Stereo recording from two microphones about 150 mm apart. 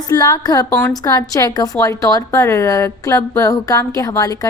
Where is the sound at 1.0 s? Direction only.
25° left (ahead or behind).